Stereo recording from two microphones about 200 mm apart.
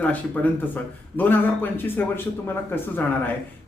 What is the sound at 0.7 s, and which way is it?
A man's voice, 10° left (ahead or behind).